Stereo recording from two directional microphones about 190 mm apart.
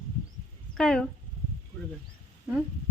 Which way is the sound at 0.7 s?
5° left (ahead or behind).